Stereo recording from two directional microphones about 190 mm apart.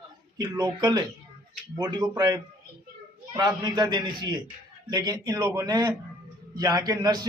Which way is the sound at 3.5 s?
20° right (ahead or behind).